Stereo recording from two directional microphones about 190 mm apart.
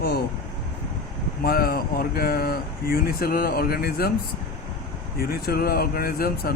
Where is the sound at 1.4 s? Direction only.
50° left (ahead or behind).